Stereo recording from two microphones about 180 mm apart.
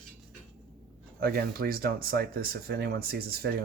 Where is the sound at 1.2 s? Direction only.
55° right (ahead or behind).